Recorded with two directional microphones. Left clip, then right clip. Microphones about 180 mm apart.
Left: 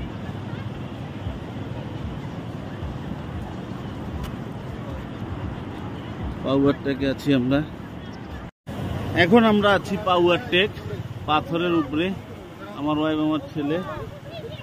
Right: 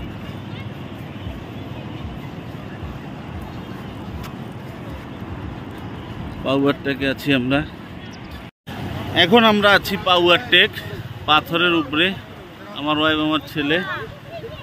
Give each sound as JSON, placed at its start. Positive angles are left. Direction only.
{"t": 6.4, "sound": "speech", "side_deg": 0}
{"t": 9.1, "sound": "speech", "side_deg": 5}
{"t": 13.6, "sound": "speech", "side_deg": -5}